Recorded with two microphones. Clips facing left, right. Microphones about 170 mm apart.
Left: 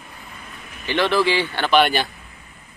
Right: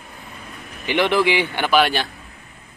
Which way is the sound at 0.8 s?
15° right (ahead or behind).